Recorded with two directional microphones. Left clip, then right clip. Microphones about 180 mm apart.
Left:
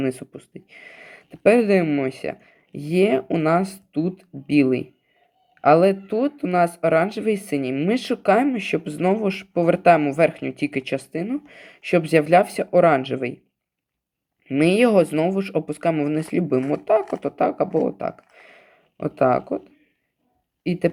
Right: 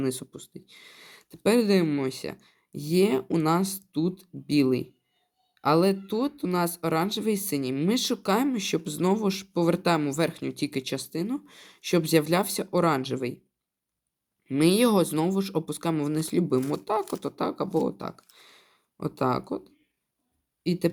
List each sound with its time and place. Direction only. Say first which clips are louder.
0.0 s speech: left 5 dB; 25° right (ahead or behind)
14.4 s speech: left 5 dB; 35° right (ahead or behind)